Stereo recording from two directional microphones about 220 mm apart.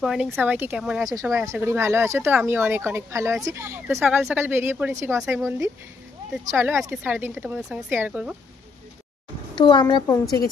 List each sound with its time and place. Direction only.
0.0 s speech: centre (ahead or behind)
1.0 s speech: 15° right (ahead or behind)
9.6 s a child's voice: 20° left (ahead or behind)